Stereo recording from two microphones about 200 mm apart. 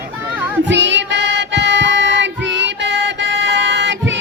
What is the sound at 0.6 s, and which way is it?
Music, 65° right (ahead or behind).